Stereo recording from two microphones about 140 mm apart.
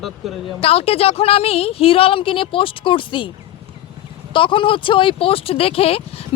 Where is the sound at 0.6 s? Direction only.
45° left (ahead or behind).